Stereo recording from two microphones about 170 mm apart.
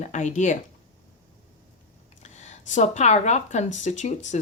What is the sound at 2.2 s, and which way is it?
Speech, 45° left (ahead or behind).